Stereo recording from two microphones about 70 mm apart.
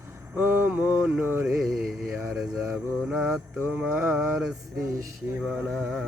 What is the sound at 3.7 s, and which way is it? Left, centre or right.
Mantra, centre.